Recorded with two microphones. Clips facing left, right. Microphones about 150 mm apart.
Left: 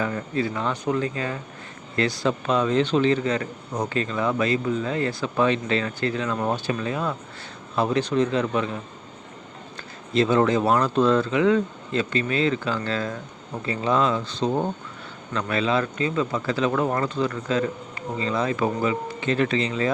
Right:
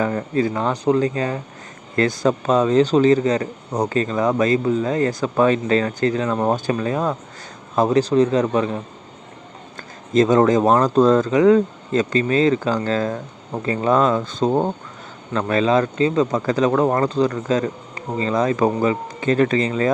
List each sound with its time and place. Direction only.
0.0 s a man's voice: 40° right (ahead or behind)